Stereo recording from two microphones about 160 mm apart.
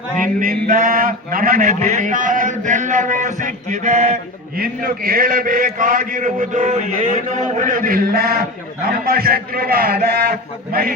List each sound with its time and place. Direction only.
0.3 s a man's voice: 55° right (ahead or behind)
4.5 s a man's voice: 65° right (ahead or behind)